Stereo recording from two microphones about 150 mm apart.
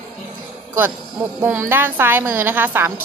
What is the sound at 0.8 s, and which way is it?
A woman's voice, 10° right (ahead or behind).